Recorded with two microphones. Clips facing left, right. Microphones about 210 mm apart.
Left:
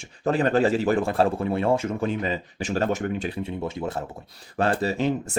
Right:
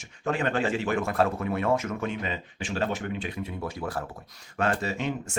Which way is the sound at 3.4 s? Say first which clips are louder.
Left 4 dB; 25° left (ahead or behind).